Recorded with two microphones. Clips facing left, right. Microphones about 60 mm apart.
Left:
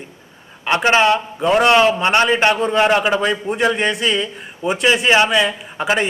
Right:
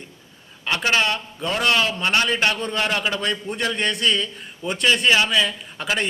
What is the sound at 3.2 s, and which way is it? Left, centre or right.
A man's voice, centre.